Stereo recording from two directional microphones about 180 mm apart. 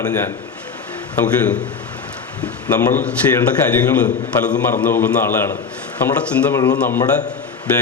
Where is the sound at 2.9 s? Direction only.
5° left (ahead or behind).